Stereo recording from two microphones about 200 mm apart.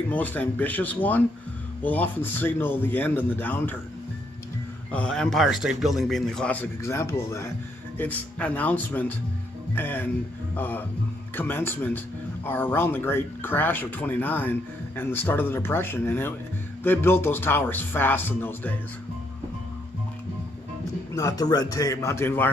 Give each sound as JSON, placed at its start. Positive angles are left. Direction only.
{"t": 0.1, "sound": "speech", "side_deg": 10}
{"t": 4.9, "sound": "a man's voice", "side_deg": 5}
{"t": 21.1, "sound": "speech", "side_deg": 15}